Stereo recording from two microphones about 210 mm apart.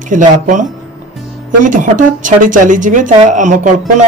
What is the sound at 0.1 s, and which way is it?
Speech, 35° right (ahead or behind).